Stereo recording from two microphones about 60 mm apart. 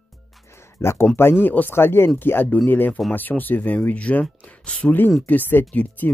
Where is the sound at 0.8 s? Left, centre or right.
Left.